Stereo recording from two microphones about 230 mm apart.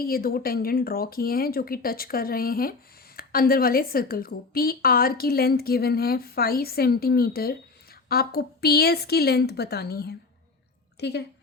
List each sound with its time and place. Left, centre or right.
0.0 s a woman's voice: left